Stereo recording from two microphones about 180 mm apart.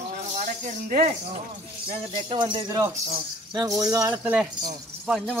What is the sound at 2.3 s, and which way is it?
Speech, 25° right (ahead or behind).